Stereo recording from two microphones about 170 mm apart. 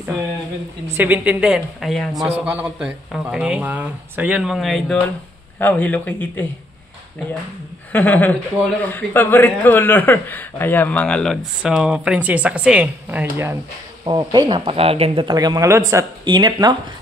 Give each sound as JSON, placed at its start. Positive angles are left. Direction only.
{"t": 0.9, "sound": "a woman's voice", "side_deg": -10}
{"t": 2.2, "sound": "a man's voice", "side_deg": -10}
{"t": 7.9, "sound": "speech", "side_deg": 10}
{"t": 14.0, "sound": "speech", "side_deg": -25}